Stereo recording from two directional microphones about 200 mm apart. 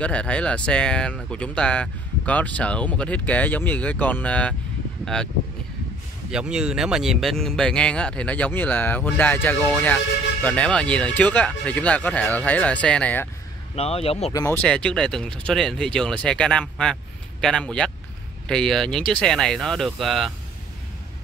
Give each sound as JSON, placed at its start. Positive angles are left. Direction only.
{"t": 0.0, "sound": "speech", "side_deg": 5}
{"t": 6.3, "sound": "speech", "side_deg": -5}
{"t": 13.7, "sound": "speech", "side_deg": 30}
{"t": 14.3, "sound": "speech", "side_deg": 10}